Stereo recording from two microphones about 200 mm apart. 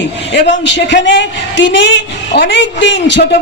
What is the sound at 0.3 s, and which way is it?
A man's voice, 65° left (ahead or behind).